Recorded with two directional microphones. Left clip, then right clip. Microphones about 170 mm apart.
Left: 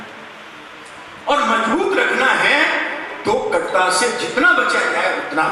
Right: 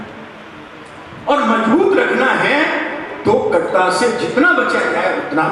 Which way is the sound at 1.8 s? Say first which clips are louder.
Right 3 dB; 10° right (ahead or behind).